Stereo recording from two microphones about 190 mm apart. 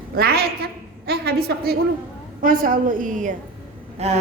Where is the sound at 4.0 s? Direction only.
35° right (ahead or behind).